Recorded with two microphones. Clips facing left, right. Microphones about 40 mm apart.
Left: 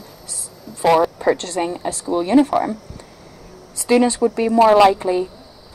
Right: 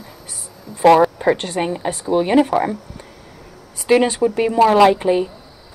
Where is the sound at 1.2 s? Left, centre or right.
Right.